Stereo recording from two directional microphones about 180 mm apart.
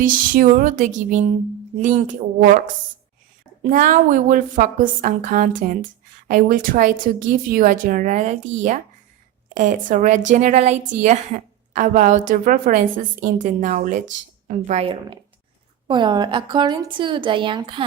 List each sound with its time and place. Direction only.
0.0 s a woman's voice: 50° right (ahead or behind)
3.6 s a woman's voice: 45° right (ahead or behind); by 17.8 s 25° right (ahead or behind)